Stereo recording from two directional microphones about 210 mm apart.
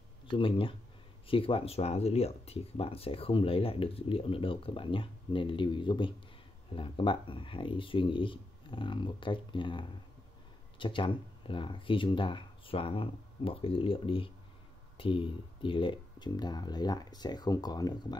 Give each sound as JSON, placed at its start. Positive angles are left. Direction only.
{"t": 0.3, "sound": "speech", "side_deg": 25}